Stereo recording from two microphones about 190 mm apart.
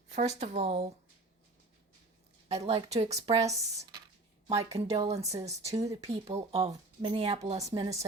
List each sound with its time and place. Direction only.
0.1 s speech: 35° right (ahead or behind)
2.5 s speech: 35° right (ahead or behind)
7.6 s a woman's voice: 20° right (ahead or behind)